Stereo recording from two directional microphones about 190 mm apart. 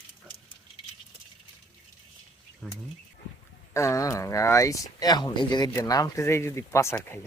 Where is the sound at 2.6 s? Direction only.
5° left (ahead or behind).